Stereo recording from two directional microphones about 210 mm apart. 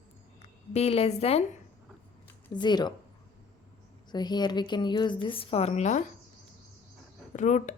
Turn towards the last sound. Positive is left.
turn(degrees=35)  # may be behind; listen again after turning